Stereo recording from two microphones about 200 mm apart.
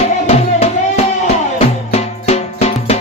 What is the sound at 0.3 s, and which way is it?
Music, 30° left (ahead or behind).